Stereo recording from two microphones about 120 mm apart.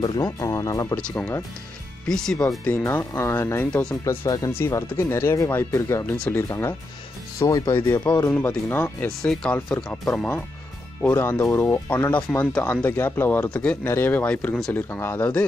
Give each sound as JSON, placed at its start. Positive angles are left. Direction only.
{"t": 0.2, "sound": "speech", "side_deg": 25}
{"t": 0.9, "sound": "speech", "side_deg": 10}
{"t": 2.8, "sound": "speech", "side_deg": 25}
{"t": 6.1, "sound": "speech", "side_deg": 10}
{"t": 7.3, "sound": "speech", "side_deg": 30}
{"t": 7.7, "sound": "speech", "side_deg": 15}
{"t": 9.2, "sound": "speech", "side_deg": 5}